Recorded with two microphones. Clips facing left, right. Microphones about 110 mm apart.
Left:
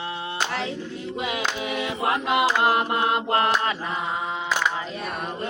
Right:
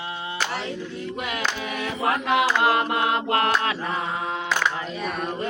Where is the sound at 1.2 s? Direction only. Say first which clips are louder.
Left 2 dB; 15° left (ahead or behind).